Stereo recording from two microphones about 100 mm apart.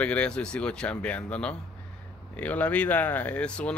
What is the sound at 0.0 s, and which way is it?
Speech, 10° left (ahead or behind).